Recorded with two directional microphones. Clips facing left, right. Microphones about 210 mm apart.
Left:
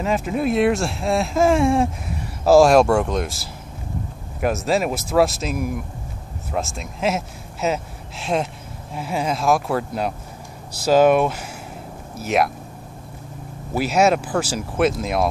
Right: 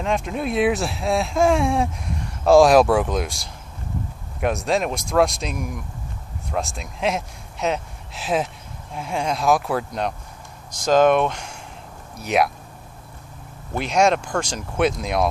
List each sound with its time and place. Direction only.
0.0 s speech: 5° left (ahead or behind)
13.7 s speech: 5° left (ahead or behind)